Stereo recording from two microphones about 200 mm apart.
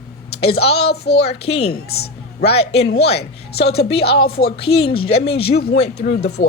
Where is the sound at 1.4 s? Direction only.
30° left (ahead or behind).